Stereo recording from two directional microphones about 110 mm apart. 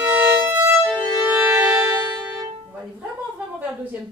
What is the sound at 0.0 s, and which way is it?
Violin, 20° right (ahead or behind).